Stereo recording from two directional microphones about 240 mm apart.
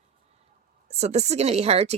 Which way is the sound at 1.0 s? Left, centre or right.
Right.